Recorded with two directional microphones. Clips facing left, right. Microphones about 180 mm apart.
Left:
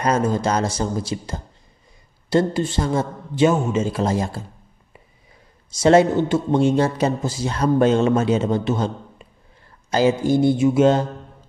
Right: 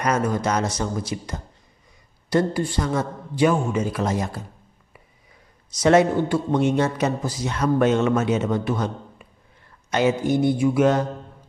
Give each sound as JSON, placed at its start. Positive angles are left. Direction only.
{"t": 0.0, "sound": "a man's voice", "side_deg": 30}
{"t": 5.7, "sound": "a man's voice", "side_deg": 30}